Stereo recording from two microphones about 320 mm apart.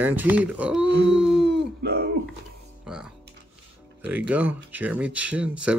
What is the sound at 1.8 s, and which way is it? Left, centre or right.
Speech, right.